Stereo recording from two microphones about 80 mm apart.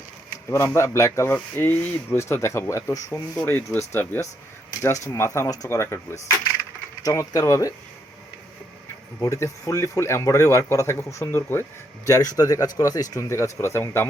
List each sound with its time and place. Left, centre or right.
0.5 s a man's voice: left
2.1 s a man's voice: left
9.2 s a man's voice: left
12.0 s speech: left
13.2 s a man's voice: left